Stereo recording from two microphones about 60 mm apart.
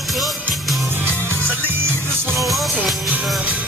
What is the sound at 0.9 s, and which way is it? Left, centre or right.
Music, right.